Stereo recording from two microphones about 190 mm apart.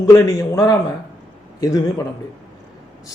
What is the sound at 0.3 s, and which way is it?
A man's voice, 20° left (ahead or behind).